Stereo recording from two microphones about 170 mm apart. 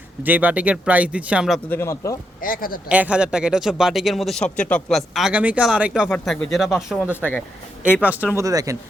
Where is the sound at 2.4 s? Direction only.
55° left (ahead or behind).